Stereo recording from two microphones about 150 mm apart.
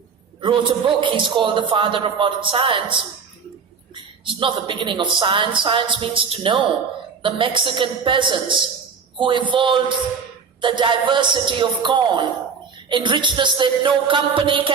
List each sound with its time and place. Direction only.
0.4 s speech: 35° right (ahead or behind)